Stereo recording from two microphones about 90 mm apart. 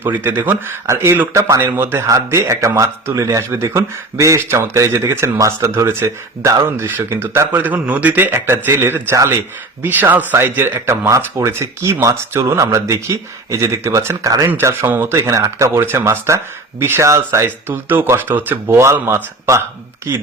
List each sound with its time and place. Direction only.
0.0 s speech: 20° right (ahead or behind)
9.1 s speech: 35° right (ahead or behind)
9.8 s speech: 20° right (ahead or behind)
15.1 s speech: 35° right (ahead or behind)